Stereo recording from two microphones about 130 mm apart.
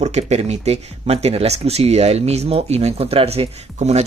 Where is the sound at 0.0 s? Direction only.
55° right (ahead or behind).